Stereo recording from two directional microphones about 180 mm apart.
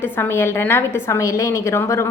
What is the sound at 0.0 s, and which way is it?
A woman's voice, 15° left (ahead or behind).